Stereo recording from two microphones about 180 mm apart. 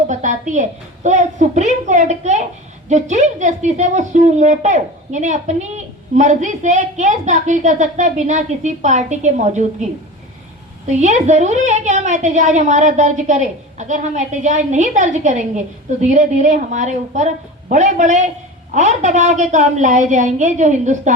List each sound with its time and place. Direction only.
0.1 s a woman's voice: 45° right (ahead or behind)
10.8 s a woman's voice: 40° right (ahead or behind)